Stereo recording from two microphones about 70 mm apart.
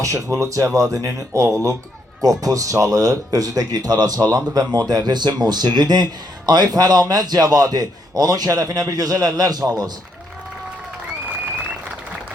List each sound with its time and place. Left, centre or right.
0.0 s speech: right
2.2 s speech: right
5.0 s speech: right